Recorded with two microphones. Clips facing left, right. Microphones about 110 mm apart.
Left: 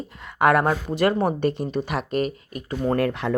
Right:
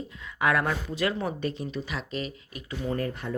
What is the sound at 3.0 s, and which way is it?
Speech, 80° left.